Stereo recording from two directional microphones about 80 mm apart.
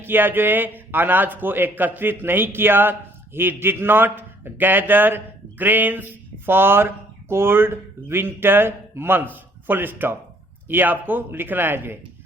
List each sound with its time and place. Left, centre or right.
0.0 s a man's voice: right